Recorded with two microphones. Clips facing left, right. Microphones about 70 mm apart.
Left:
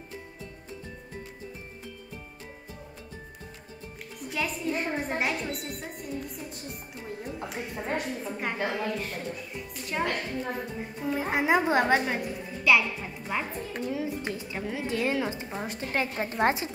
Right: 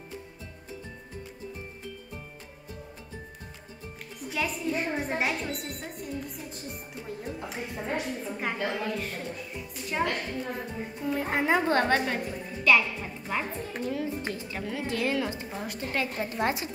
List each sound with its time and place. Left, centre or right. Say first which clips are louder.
4.2 s a woman's voice: even; centre; by 16.7 s left